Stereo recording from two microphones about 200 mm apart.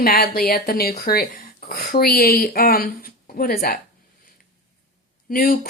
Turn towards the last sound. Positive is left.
turn(degrees=45)  # may be behind; listen again after turning